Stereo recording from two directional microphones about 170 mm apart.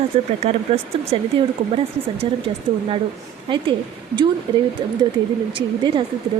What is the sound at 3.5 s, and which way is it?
A woman's voice, 30° right (ahead or behind).